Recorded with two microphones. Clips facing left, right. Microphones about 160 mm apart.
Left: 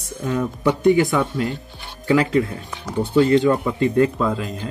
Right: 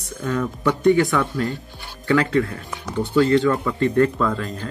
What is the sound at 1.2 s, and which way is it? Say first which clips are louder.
Speech: left 1 dB; 20° left (ahead or behind).